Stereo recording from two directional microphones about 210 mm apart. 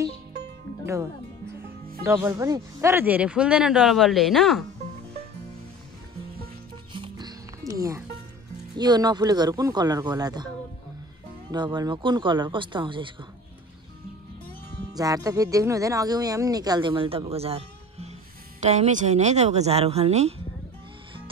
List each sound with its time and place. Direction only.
2.0 s speech: 15° right (ahead or behind)
6.9 s music: 20° right (ahead or behind)
8.7 s speech: 20° right (ahead or behind)
11.5 s speech: 20° right (ahead or behind)
15.0 s speech: 15° right (ahead or behind)